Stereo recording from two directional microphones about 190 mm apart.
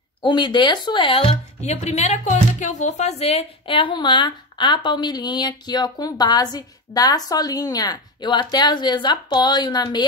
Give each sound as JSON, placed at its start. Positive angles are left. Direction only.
{"t": 0.2, "sound": "speech", "side_deg": 25}